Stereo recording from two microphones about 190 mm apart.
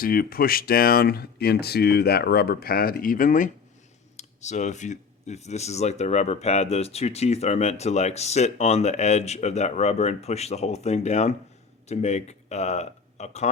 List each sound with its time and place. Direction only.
0.0 s speech: 50° left (ahead or behind)